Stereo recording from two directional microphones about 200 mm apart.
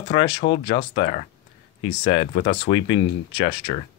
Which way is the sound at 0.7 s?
45° left (ahead or behind).